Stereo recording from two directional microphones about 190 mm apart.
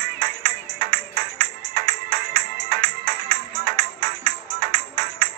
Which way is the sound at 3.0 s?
50° right (ahead or behind).